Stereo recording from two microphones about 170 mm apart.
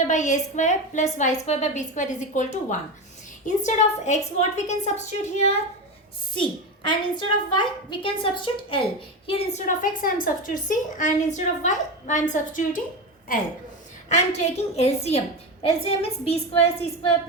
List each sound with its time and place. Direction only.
0.1 s a woman's voice: 45° left (ahead or behind)
6.3 s a woman's voice: 30° left (ahead or behind); by 13.5 s 55° left (ahead or behind)
14.1 s a woman's voice: 40° left (ahead or behind)